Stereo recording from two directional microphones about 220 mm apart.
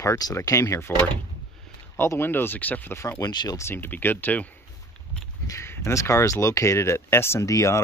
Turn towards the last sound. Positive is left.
turn(degrees=15)  # may be behind; listen again after turning